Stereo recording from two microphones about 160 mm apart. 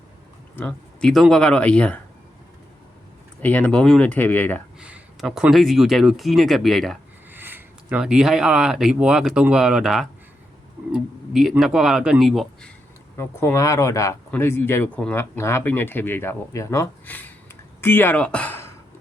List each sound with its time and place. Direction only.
0.5 s speech: 5° left (ahead or behind)
3.4 s speech: 10° left (ahead or behind)
4.8 s speech: 5° right (ahead or behind)
7.3 s speech: 10° right (ahead or behind)
13.1 s speech: 15° left (ahead or behind)